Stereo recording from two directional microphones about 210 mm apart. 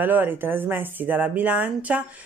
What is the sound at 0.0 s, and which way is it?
Speech, 10° right (ahead or behind).